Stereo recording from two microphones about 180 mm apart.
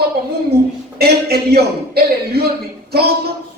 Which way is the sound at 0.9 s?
60° right (ahead or behind).